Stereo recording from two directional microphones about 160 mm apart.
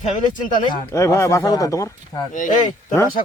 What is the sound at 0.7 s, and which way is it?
Speech, 20° left (ahead or behind).